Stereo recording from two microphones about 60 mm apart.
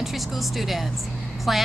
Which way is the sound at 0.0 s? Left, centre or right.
Centre.